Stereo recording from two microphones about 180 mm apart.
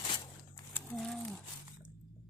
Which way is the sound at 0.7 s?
5° left (ahead or behind).